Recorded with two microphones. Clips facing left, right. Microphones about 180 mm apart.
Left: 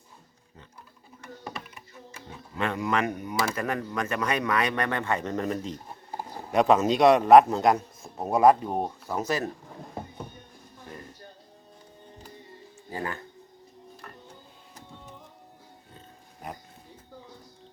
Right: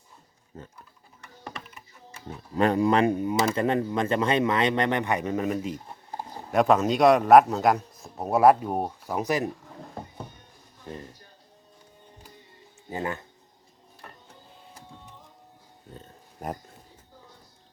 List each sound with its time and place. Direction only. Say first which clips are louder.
2.6 s a man's voice: right 6 dB; 35° right (ahead or behind); by 9.5 s 15° right (ahead or behind)
12.9 s speech: right 3 dB; 25° right (ahead or behind)